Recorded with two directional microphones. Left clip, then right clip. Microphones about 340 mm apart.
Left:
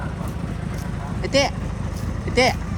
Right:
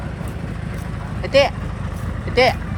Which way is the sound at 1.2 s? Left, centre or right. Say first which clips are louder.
Right 5 dB; centre.